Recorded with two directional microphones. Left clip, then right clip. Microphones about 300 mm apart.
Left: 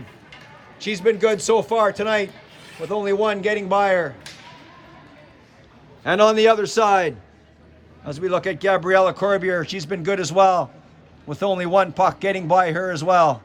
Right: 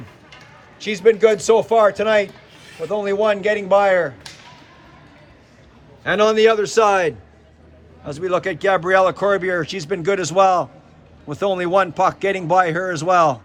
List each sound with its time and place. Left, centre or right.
0.8 s speech: centre
2.6 s a sound: centre
2.9 s speech: centre
6.0 s a man's voice: centre